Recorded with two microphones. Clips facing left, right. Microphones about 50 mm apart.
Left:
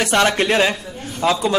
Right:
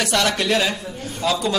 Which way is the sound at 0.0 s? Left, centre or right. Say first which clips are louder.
Left 4 dB; left.